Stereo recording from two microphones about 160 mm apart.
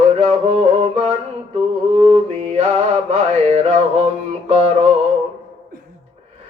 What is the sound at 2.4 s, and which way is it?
Music, 45° right (ahead or behind).